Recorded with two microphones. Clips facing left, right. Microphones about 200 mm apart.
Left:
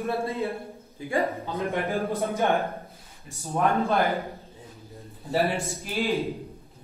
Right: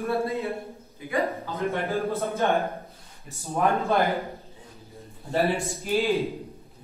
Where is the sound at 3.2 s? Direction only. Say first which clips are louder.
Right 1 dB; centre (ahead or behind).